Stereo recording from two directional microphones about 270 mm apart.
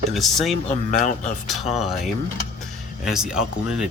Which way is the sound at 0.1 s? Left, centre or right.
Centre.